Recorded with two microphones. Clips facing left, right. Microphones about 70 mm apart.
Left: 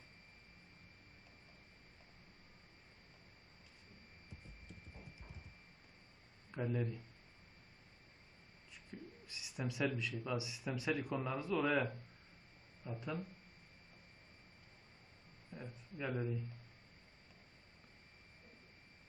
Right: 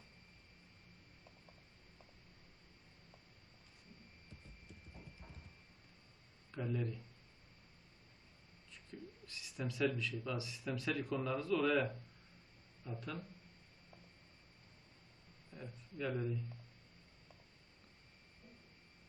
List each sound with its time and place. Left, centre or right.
6.5 s speech: centre
9.2 s bird: centre
10.0 s a man's voice: centre
15.5 s speech: centre